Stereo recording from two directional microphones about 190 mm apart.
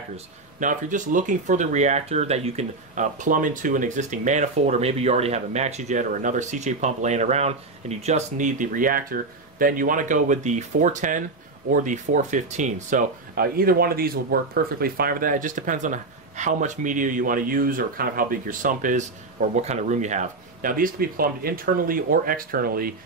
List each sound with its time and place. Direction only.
0.6 s speech: 40° right (ahead or behind)